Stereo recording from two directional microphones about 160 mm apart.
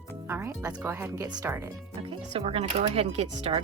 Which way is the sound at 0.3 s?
15° right (ahead or behind).